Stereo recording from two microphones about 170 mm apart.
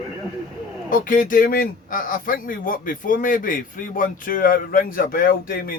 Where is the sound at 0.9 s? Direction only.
55° left (ahead or behind).